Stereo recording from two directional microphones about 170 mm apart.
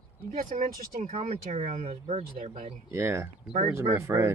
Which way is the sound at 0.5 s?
45° right (ahead or behind).